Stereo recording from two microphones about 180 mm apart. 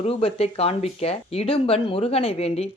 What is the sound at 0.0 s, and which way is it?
Speech, 35° left (ahead or behind).